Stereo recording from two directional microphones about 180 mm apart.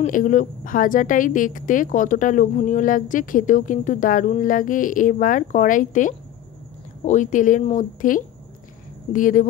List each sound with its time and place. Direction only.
0.0 s speech: 45° left (ahead or behind)